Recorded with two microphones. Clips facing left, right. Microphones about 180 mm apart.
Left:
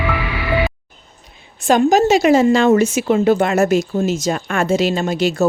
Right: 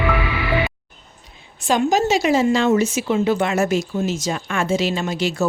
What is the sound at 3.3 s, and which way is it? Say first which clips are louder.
A woman's voice: left 4 dB; 40° left (ahead or behind).